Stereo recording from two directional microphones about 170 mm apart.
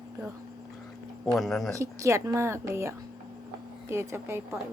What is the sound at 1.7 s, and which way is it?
A woman's voice, 15° right (ahead or behind).